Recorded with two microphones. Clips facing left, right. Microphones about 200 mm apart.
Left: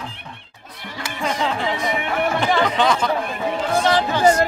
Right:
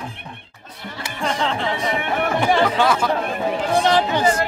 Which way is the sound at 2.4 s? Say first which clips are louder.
Right 3 dB; 15° right (ahead or behind).